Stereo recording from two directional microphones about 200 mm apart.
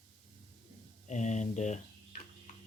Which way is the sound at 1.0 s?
35° left (ahead or behind).